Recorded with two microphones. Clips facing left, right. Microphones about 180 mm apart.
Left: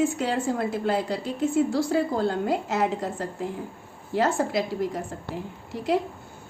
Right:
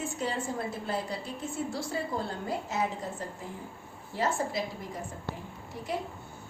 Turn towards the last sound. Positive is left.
turn(degrees=90)